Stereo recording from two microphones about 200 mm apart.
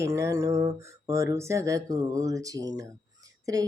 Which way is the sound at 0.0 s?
15° right (ahead or behind).